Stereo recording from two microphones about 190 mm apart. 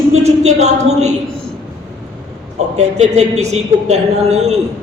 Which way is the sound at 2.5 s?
35° right (ahead or behind).